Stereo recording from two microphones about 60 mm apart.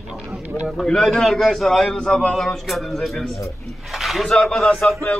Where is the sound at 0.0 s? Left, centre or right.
Centre.